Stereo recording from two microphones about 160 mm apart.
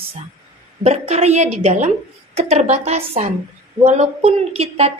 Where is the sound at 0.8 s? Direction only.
40° right (ahead or behind).